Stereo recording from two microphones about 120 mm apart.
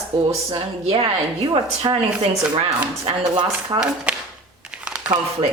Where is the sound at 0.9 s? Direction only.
55° right (ahead or behind).